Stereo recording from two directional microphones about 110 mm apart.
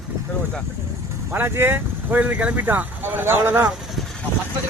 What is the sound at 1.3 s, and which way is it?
Speech, 20° right (ahead or behind).